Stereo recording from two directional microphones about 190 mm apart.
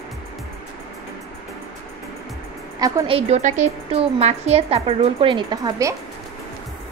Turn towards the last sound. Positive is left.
turn(degrees=-15)  # may be behind; listen again after turning